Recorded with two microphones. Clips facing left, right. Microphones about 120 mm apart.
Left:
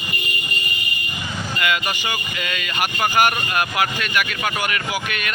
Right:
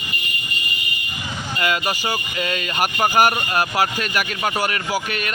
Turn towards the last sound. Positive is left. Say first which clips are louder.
# right 1 dB
turn(degrees=-35)  # may be behind; listen again after turning